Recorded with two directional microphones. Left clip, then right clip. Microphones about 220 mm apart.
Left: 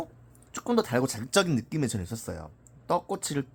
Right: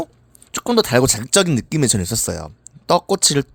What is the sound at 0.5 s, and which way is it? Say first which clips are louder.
A man's voice: right 11 dB; 45° right (ahead or behind).